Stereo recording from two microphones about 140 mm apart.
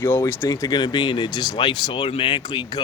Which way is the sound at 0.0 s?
20° left (ahead or behind).